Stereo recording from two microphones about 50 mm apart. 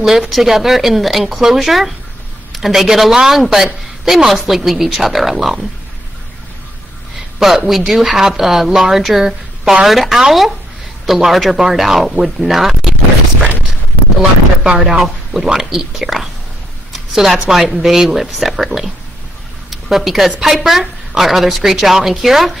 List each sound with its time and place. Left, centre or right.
0.3 s a man's voice: centre
7.3 s a man's voice: centre
14.6 s speech: centre
15.0 s a man's voice: centre
16.9 s a sound: centre
17.5 s a woman's voice: centre